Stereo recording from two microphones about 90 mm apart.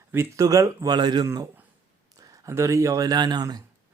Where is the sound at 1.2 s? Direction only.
35° right (ahead or behind).